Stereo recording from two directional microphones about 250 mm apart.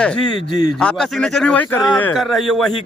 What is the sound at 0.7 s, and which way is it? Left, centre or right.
A man's voice, centre.